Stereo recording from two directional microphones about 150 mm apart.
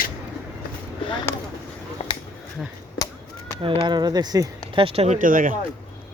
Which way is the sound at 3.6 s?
35° right (ahead or behind).